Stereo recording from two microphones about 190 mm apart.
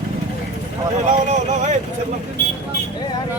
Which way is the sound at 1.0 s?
40° right (ahead or behind).